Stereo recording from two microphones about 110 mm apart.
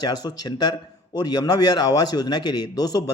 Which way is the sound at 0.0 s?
40° left (ahead or behind).